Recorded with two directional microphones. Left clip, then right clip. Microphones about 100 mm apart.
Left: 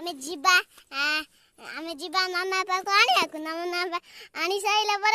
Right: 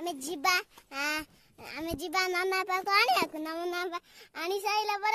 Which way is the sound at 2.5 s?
20° left (ahead or behind).